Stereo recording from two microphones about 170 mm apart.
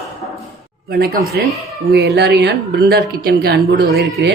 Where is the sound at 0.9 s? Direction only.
65° right (ahead or behind).